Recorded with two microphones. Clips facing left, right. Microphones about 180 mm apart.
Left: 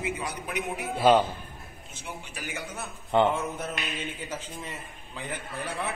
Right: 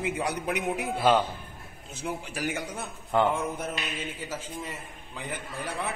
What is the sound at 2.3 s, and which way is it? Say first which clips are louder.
Speech: right 7 dB; 75° right (ahead or behind).